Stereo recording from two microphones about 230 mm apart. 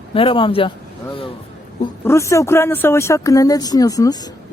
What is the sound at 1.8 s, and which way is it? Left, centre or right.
Speech, centre.